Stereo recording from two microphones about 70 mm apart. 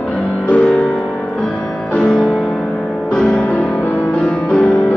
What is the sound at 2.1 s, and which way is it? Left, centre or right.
Music, centre.